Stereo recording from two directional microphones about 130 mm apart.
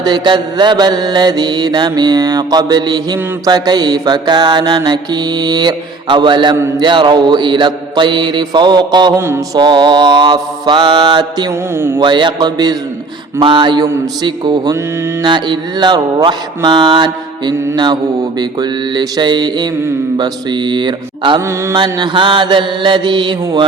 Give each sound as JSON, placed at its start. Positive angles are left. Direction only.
{"t": 0.0, "sound": "mantra", "side_deg": -35}
{"t": 9.1, "sound": "a man's voice", "side_deg": -20}
{"t": 9.6, "sound": "mantra", "side_deg": -35}
{"t": 11.7, "sound": "a man's voice", "side_deg": -20}
{"t": 12.0, "sound": "mantra", "side_deg": -35}